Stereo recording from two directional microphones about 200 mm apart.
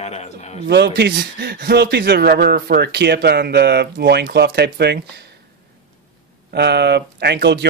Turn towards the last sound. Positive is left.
turn(degrees=-55)  # may be behind; listen again after turning